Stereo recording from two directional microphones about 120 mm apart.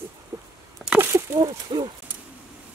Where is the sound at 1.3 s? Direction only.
35° right (ahead or behind).